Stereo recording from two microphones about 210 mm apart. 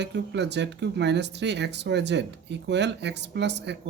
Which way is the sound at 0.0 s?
55° right (ahead or behind).